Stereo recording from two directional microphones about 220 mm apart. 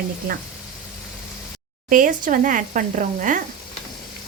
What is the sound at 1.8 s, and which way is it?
Speech, 35° right (ahead or behind).